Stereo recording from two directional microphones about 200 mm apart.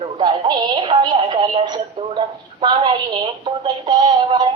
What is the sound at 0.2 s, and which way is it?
Synthetic singing, 20° right (ahead or behind).